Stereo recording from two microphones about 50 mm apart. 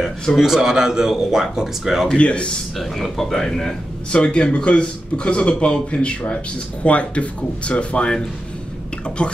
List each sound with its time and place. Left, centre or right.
0.4 s speech: centre
2.0 s a man's voice: left
2.8 s speech: centre
4.1 s a man's voice: centre
9.2 s a man's voice: left